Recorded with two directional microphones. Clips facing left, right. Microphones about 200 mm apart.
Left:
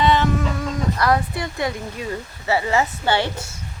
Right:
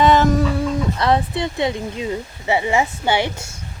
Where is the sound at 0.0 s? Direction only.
45° right (ahead or behind).